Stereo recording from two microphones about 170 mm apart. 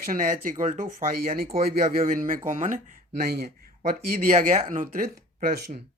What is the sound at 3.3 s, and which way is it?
Speech, 65° right (ahead or behind).